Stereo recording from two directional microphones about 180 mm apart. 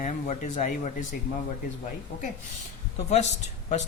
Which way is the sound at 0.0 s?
40° left (ahead or behind).